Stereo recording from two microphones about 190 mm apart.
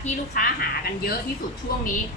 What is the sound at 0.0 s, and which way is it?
A woman's voice, 50° left (ahead or behind).